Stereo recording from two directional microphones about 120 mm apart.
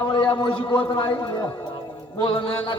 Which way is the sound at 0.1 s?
40° left (ahead or behind).